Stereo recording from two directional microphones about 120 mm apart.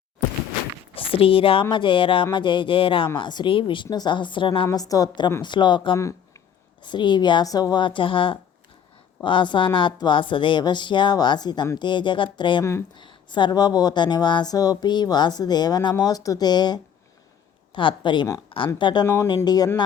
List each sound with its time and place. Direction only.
0.9 s a woman's voice: 50° left (ahead or behind)
4.8 s speech: 30° left (ahead or behind)
19.0 s speech: 25° left (ahead or behind)